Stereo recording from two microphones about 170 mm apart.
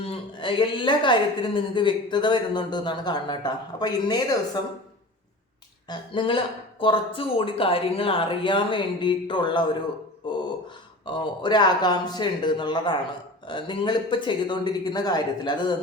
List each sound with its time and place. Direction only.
0.0 s speech: 30° left (ahead or behind)
5.9 s speech: 30° left (ahead or behind)
11.0 s speech: 30° left (ahead or behind)